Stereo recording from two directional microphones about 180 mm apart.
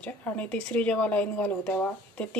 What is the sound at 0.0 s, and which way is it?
A woman's voice, 5° left (ahead or behind).